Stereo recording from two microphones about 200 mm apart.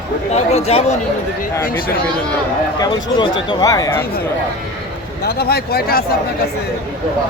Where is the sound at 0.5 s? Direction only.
30° left (ahead or behind).